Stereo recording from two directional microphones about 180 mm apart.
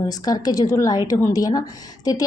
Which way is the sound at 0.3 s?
20° left (ahead or behind).